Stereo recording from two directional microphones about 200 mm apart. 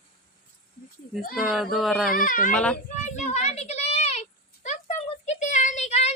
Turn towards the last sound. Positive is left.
turn(degrees=35)  # may be behind; listen again after turning